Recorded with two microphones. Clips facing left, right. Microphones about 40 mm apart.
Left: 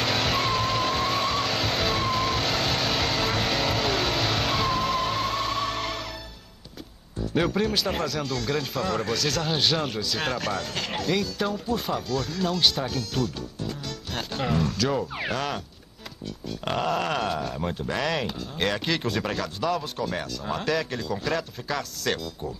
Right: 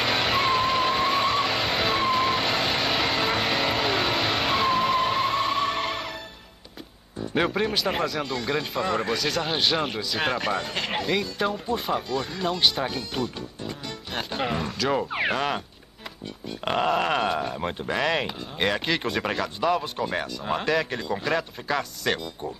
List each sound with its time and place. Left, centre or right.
0.0 s vehicle: centre
7.2 s speech: right